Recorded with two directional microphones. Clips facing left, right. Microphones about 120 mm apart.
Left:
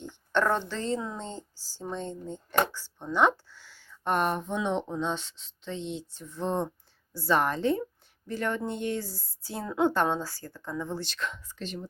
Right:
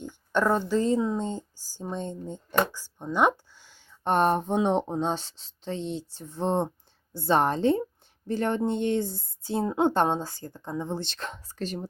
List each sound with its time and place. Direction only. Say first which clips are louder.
0.0 s a woman's voice: right 2 dB; 10° right (ahead or behind); by 11.3 s 25° right (ahead or behind)
11.3 s speech: right 4 dB; 40° right (ahead or behind)